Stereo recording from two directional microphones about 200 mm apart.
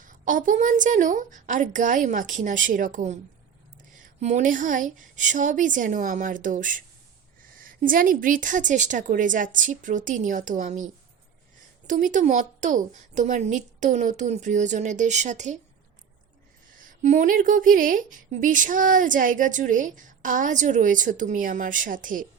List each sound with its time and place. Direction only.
0.0 s a woman's voice: 40° right (ahead or behind)
4.2 s a woman's voice: 35° right (ahead or behind)
11.9 s a woman's voice: 40° right (ahead or behind)
16.7 s a woman's voice: 40° right (ahead or behind)